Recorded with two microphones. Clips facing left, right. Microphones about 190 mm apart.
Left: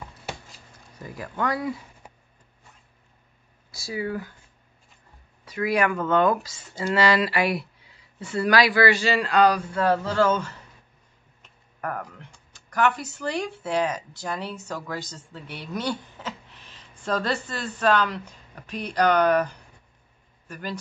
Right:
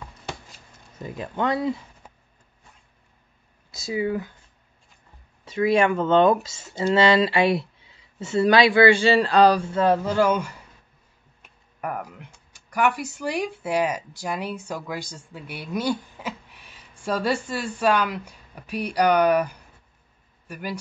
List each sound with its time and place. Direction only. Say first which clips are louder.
0.9 s speech: right 3 dB; 20° right (ahead or behind)
2.0 s a sound: left 1 dB; 10° left (ahead or behind)
3.7 s speech: right 4 dB; 20° right (ahead or behind)
5.4 s speech: right 4 dB; 25° right (ahead or behind)